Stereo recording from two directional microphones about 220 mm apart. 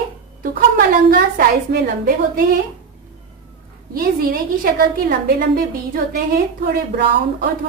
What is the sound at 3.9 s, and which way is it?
A woman's voice, 40° right (ahead or behind).